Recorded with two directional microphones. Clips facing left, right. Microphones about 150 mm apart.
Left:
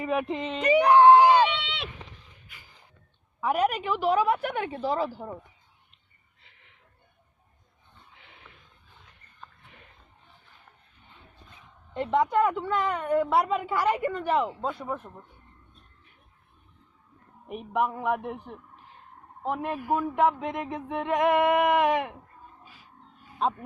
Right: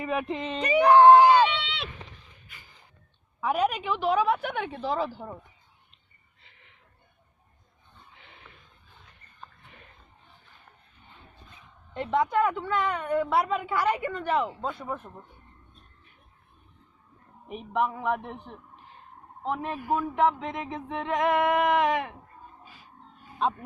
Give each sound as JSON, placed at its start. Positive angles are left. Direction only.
{"t": 0.0, "sound": "a woman's voice", "side_deg": 5}
{"t": 0.9, "sound": "screaming", "side_deg": 10}
{"t": 3.4, "sound": "a woman's voice", "side_deg": 5}
{"t": 11.9, "sound": "a woman's voice", "side_deg": 5}
{"t": 17.5, "sound": "a sound", "side_deg": 10}
{"t": 19.5, "sound": "a sound", "side_deg": 10}